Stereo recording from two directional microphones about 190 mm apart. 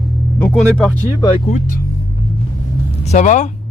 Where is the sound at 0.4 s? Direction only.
5° left (ahead or behind).